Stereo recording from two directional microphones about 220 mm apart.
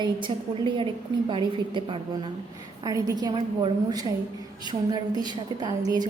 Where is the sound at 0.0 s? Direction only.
20° right (ahead or behind).